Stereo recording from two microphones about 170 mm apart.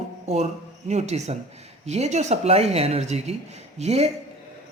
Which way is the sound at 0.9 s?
40° right (ahead or behind).